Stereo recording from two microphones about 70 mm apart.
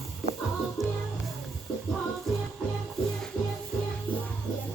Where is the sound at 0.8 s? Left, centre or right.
Centre.